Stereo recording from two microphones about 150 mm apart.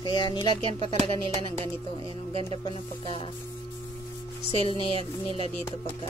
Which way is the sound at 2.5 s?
35° left (ahead or behind).